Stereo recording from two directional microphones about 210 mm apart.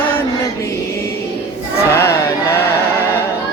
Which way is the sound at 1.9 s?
15° left (ahead or behind).